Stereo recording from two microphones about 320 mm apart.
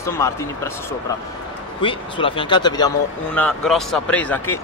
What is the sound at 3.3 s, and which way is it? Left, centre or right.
A man's voice, centre.